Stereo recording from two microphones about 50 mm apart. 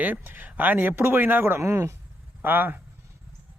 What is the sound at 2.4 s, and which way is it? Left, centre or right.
Speech, right.